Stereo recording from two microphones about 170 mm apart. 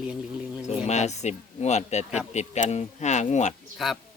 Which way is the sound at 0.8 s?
40° left (ahead or behind).